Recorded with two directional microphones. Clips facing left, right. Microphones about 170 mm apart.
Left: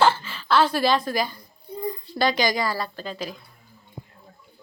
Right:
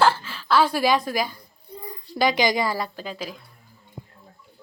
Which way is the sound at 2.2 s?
15° right (ahead or behind).